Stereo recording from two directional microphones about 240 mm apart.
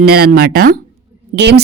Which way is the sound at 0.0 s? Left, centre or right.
Right.